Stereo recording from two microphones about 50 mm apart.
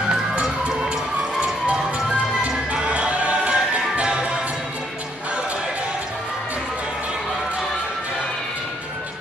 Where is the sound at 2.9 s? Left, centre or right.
Right.